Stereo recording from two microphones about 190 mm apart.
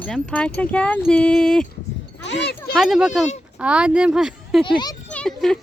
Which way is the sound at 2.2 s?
65° left (ahead or behind).